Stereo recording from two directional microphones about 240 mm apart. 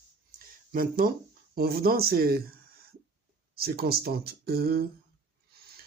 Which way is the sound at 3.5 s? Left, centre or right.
Right.